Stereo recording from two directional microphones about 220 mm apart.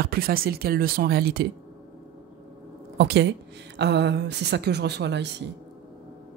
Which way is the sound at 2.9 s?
50° right (ahead or behind).